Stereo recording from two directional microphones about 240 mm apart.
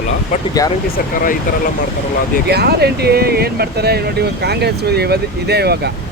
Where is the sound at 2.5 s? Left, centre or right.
Right.